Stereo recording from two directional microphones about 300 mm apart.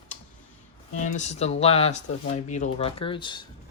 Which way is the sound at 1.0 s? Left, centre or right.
Left.